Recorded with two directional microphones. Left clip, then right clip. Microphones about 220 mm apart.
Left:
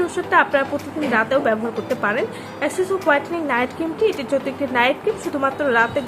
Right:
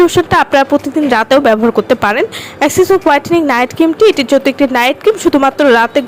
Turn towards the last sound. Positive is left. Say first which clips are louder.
# right 10 dB
turn(degrees=-45)  # may be behind; listen again after turning